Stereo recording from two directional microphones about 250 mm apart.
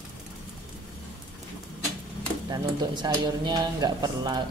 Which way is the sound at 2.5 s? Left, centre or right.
Centre.